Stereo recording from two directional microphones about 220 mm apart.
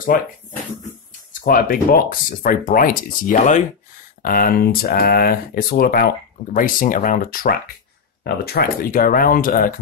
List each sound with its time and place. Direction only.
0.1 s speech: 40° left (ahead or behind)
1.4 s speech: 45° left (ahead or behind)